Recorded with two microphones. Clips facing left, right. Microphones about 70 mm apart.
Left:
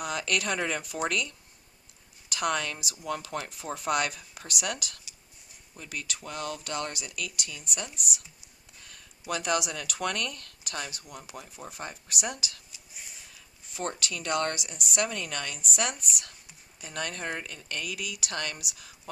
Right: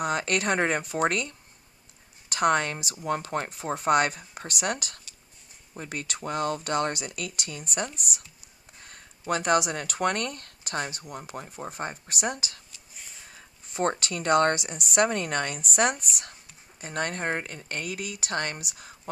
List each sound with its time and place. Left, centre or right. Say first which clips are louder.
0.0 s speech: right 4 dB; right